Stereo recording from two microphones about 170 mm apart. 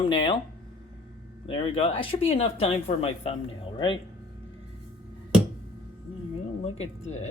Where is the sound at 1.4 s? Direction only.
30° left (ahead or behind).